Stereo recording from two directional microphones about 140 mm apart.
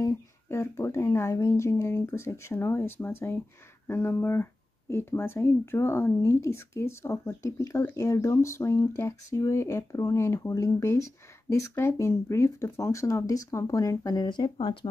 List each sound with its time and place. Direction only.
0.0 s speech: 20° left (ahead or behind); by 14.9 s 35° left (ahead or behind)